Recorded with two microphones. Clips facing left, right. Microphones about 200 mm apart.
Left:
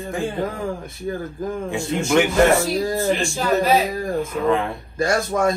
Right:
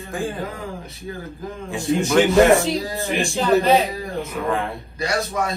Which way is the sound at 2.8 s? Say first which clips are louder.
Left 6 dB; 50° left (ahead or behind).